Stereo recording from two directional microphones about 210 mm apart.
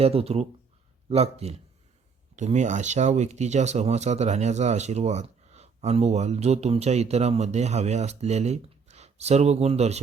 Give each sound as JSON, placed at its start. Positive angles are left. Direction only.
{"t": 0.0, "sound": "speech", "side_deg": -30}